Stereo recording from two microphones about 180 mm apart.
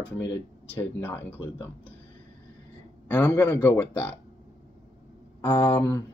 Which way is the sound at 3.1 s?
10° left (ahead or behind).